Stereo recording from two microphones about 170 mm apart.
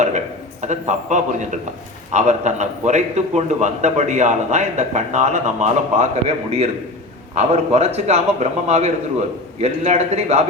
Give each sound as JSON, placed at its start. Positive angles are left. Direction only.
{"t": 0.7, "sound": "a man's voice", "side_deg": -45}